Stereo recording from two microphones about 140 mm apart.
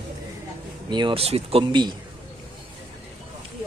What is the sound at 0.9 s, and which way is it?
Speech, 35° right (ahead or behind).